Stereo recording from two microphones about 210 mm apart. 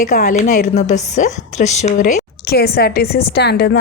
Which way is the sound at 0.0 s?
40° left (ahead or behind).